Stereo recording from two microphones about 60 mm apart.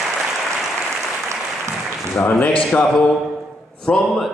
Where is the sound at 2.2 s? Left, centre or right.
Left.